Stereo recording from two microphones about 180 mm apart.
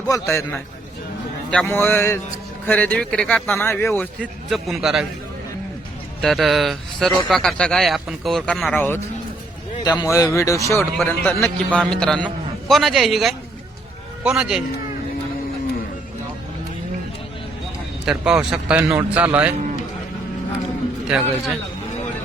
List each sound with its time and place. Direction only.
0.1 s a man's voice: 15° left (ahead or behind); by 5.0 s centre (ahead or behind)
6.2 s speech: centre (ahead or behind)
9.8 s speech: 20° left (ahead or behind)
10.8 s a man's voice: centre (ahead or behind)
18.0 s a man's voice: 5° right (ahead or behind)